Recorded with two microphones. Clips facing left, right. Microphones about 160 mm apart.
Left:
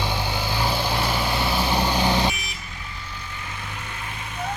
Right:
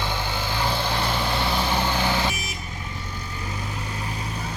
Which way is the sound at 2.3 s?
40° right (ahead or behind).